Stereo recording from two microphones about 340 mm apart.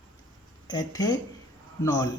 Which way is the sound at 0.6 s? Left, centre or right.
Centre.